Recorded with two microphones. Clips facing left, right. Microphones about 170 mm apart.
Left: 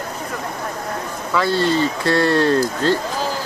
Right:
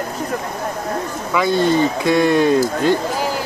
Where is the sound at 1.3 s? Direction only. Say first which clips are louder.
Right 2 dB; 15° right (ahead or behind).